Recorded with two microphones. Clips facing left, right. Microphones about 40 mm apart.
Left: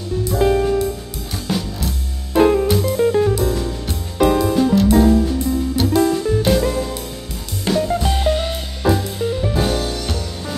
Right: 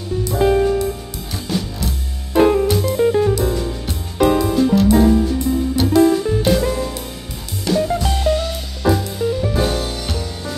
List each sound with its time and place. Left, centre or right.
0.3 s music: centre
7.7 s music: centre
8.2 s music: left
8.8 s music: centre